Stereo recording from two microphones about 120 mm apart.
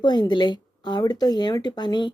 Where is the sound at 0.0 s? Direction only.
35° left (ahead or behind).